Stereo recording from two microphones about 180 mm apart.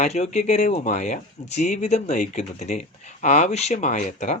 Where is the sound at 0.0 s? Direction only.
40° left (ahead or behind).